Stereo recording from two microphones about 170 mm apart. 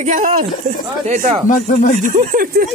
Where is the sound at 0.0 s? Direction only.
45° right (ahead or behind).